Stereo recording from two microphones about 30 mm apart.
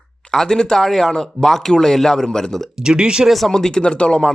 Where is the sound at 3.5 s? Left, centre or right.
Left.